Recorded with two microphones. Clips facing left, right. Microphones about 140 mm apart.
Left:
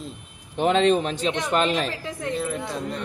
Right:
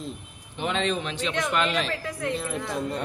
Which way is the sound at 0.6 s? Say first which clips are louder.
Left 8 dB; 40° left (ahead or behind).